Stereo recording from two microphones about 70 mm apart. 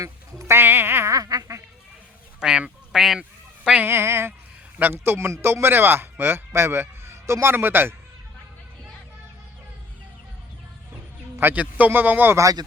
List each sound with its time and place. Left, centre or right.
0.0 s music: right
1.1 s quack: right
2.4 s speech: centre
2.9 s goose: centre
3.2 s goose: centre
3.8 s a man's voice: right
11.3 s a man's voice: right